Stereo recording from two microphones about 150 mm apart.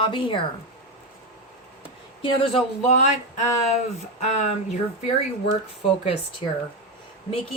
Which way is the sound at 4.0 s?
50° left (ahead or behind).